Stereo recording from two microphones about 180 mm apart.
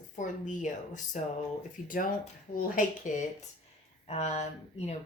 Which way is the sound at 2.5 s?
50° left (ahead or behind).